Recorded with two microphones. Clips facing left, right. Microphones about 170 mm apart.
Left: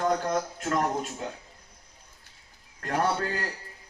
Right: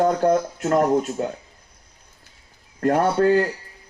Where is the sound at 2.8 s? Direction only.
45° right (ahead or behind).